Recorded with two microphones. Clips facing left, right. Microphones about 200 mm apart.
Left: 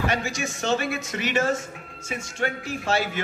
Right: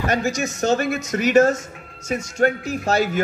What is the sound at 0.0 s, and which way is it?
Speech, 40° right (ahead or behind).